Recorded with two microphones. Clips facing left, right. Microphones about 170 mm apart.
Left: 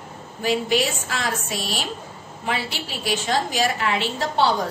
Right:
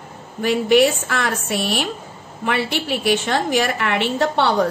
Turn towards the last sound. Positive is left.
turn(degrees=-65)  # may be behind; listen again after turning